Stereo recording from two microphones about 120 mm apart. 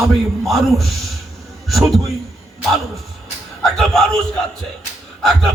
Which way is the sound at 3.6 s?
5° left (ahead or behind).